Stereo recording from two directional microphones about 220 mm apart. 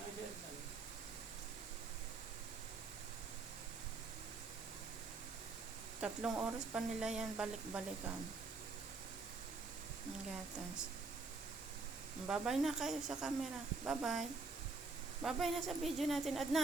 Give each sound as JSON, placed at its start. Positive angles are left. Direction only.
{"t": 6.0, "sound": "speech", "side_deg": -5}
{"t": 12.3, "sound": "speech", "side_deg": 0}